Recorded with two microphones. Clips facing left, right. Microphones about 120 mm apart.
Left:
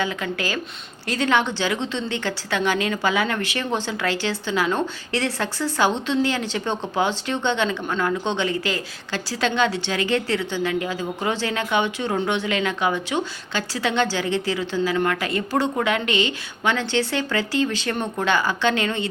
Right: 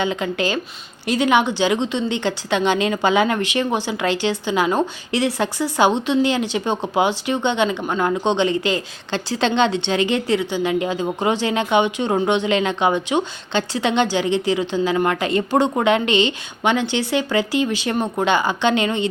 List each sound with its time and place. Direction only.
0.0 s speech: 20° right (ahead or behind)